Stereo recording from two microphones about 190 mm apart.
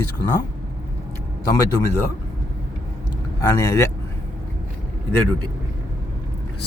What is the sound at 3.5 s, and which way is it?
Speech, 15° left (ahead or behind).